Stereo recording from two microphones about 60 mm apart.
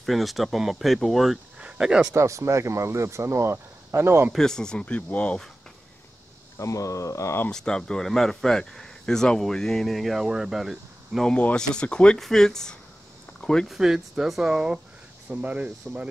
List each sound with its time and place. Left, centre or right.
0.0 s speech: centre
1.8 s speech: centre
2.1 s speech: right
4.3 s speech: centre
4.8 s speech: left
6.6 s speech: left
7.5 s speech: centre
11.5 s speech: centre
13.4 s a sound: centre
13.7 s speech: centre
15.2 s speech: right